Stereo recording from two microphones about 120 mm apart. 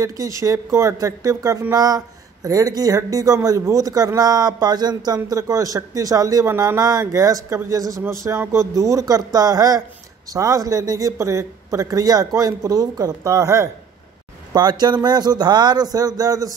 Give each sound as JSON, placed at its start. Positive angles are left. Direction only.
{"t": 0.0, "sound": "speech", "side_deg": -30}